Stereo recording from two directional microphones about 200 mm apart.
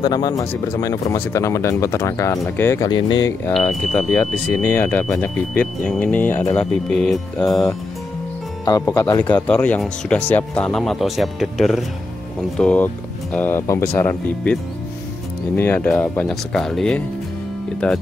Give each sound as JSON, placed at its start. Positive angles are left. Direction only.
{"t": 0.0, "sound": "speech", "side_deg": 20}
{"t": 3.5, "sound": "speech", "side_deg": 5}
{"t": 6.9, "sound": "speech", "side_deg": 0}
{"t": 8.6, "sound": "speech", "side_deg": 15}